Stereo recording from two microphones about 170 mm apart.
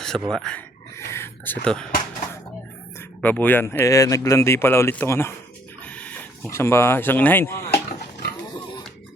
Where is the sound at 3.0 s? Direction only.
10° left (ahead or behind).